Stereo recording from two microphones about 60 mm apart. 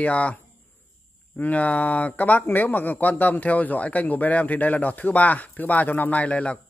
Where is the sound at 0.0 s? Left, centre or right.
Left.